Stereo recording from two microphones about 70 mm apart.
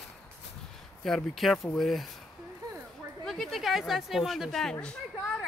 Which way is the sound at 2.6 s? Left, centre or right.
Right.